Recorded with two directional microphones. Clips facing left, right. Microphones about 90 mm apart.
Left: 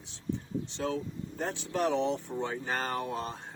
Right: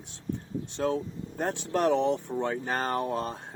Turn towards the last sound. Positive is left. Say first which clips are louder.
# right 4 dB
turn(degrees=-50)  # may be behind; listen again after turning